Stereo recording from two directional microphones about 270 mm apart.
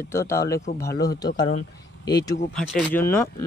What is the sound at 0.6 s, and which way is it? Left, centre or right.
Speech, left.